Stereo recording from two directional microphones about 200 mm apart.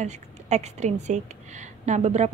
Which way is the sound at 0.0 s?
35° right (ahead or behind).